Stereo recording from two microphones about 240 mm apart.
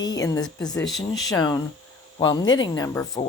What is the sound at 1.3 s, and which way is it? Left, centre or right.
Speech, centre.